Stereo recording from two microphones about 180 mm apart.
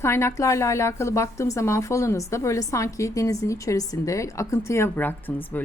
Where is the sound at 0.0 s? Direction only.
15° left (ahead or behind).